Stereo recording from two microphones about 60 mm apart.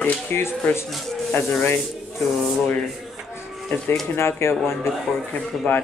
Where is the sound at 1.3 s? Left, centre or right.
Left.